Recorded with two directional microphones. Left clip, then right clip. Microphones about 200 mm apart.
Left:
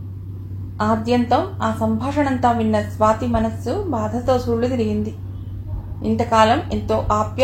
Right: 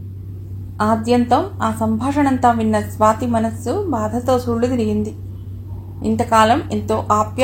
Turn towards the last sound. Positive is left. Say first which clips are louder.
# right 2 dB
turn(degrees=-40)  # may be behind; listen again after turning